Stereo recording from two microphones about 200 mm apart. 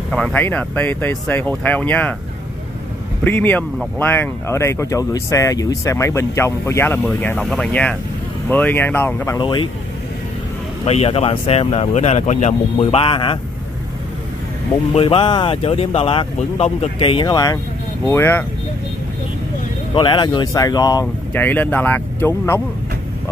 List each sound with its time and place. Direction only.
0.1 s speech: 5° left (ahead or behind)
3.3 s speech: 10° left (ahead or behind)
9.4 s speech: 25° left (ahead or behind)
10.9 s speech: 30° left (ahead or behind)
15.0 s speech: 25° left (ahead or behind)
19.9 s speech: 25° left (ahead or behind)